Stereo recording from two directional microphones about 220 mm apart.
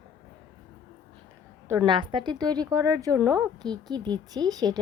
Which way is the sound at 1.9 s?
20° right (ahead or behind).